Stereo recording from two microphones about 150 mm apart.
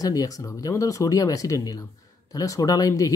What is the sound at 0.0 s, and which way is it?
Speech, 25° left (ahead or behind).